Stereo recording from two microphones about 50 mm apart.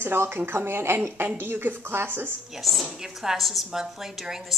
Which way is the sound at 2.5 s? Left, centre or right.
Centre.